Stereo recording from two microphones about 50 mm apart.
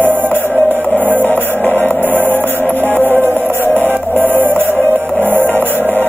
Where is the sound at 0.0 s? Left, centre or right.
Right.